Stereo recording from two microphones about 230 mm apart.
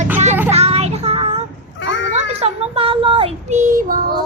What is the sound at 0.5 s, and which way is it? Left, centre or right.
Child singing, right.